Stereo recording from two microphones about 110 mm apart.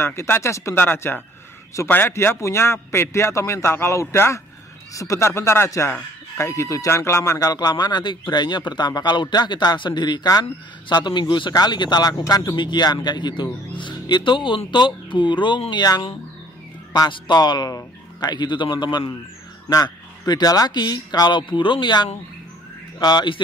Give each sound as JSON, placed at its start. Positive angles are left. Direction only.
{"t": 0.0, "sound": "a man's voice", "side_deg": 25}
{"t": 17.1, "sound": "a man's voice", "side_deg": 40}